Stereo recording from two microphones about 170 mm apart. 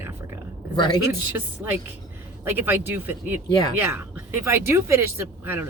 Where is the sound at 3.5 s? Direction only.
25° left (ahead or behind).